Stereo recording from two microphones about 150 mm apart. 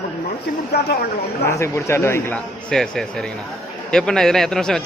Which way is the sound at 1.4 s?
20° left (ahead or behind).